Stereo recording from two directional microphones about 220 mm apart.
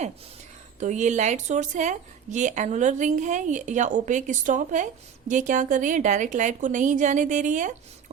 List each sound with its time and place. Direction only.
0.8 s a woman's voice: 35° right (ahead or behind)